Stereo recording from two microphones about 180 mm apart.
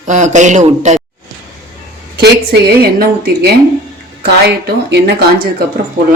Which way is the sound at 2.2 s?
60° right (ahead or behind).